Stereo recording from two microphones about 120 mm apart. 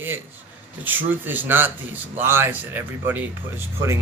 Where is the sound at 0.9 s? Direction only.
15° right (ahead or behind).